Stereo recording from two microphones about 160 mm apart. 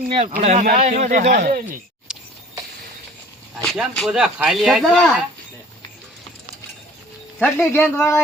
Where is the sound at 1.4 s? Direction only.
65° right (ahead or behind).